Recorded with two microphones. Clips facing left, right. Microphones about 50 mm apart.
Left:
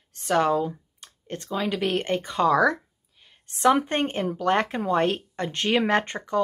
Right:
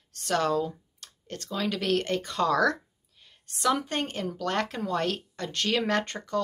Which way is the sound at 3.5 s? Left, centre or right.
Left.